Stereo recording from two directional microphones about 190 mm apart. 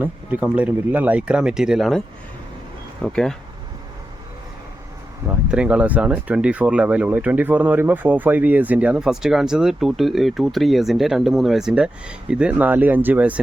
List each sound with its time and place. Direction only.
0.0 s speech: 10° right (ahead or behind)
3.0 s speech: 5° left (ahead or behind)
5.2 s speech: 5° right (ahead or behind)